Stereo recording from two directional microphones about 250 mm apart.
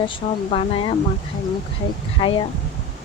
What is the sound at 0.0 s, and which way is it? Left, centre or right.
Speech, left.